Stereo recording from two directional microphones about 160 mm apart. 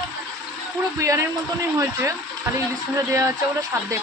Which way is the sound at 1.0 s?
20° right (ahead or behind).